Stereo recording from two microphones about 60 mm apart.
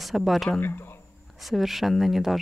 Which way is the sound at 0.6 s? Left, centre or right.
Left.